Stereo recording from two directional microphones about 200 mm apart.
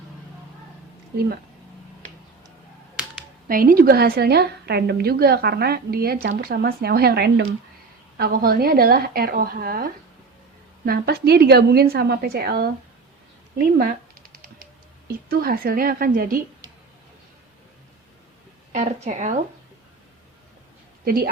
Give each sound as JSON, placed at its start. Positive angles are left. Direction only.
{"t": 2.9, "sound": "whip", "side_deg": -5}
{"t": 3.5, "sound": "a woman's voice", "side_deg": -45}
{"t": 18.7, "sound": "a woman's voice", "side_deg": -35}
{"t": 21.0, "sound": "a woman's voice", "side_deg": -50}